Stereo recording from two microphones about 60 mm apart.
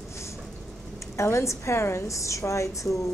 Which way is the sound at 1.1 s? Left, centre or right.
Left.